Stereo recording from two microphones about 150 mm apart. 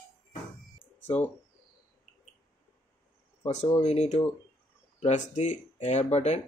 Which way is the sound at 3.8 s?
50° left (ahead or behind).